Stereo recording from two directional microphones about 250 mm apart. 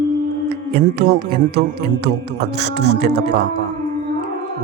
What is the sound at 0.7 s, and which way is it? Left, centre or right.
Speech, right.